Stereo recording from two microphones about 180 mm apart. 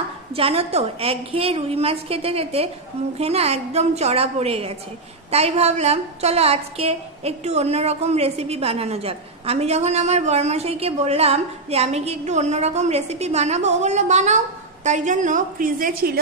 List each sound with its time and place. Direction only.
0.4 s a woman's voice: 35° right (ahead or behind); by 16.2 s 55° right (ahead or behind)